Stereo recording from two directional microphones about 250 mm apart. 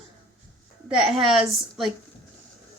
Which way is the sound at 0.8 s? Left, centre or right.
Centre.